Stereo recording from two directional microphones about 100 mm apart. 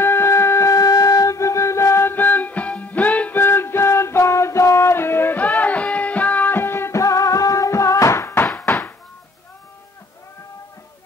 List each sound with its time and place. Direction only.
0.0 s wind instrument: 25° left (ahead or behind)
5.6 s music: 15° left (ahead or behind)
8.6 s chopping: 20° left (ahead or behind)